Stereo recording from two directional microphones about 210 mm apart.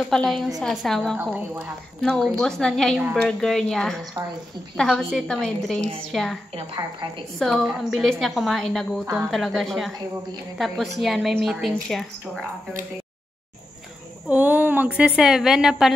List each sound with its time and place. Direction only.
0.1 s a woman's voice: centre (ahead or behind)
6.5 s a woman's voice: 20° right (ahead or behind)
7.3 s a woman's voice: centre (ahead or behind)
14.3 s a woman's voice: 10° right (ahead or behind)